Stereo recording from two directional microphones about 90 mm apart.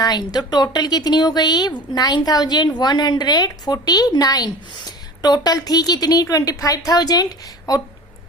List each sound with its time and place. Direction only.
0.0 s a woman's voice: 50° left (ahead or behind)